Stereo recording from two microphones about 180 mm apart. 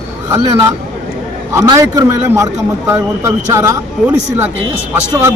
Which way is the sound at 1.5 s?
20° right (ahead or behind).